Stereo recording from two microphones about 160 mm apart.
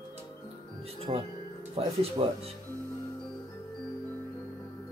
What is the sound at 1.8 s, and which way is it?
Speech, 35° right (ahead or behind).